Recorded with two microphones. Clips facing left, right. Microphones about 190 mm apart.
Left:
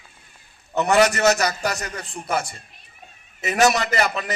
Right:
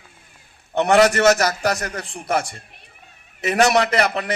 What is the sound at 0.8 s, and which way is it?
A man's voice, 60° right (ahead or behind).